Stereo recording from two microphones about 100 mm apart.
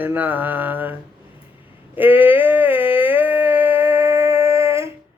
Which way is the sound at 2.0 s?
20° right (ahead or behind).